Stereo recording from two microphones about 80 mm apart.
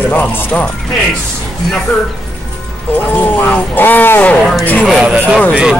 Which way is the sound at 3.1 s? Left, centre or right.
Left.